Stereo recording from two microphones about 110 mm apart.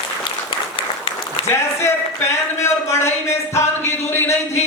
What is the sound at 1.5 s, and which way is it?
Speech, 25° left (ahead or behind).